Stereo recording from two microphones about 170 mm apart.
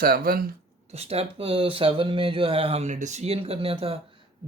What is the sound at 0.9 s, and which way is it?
Speech, 35° right (ahead or behind).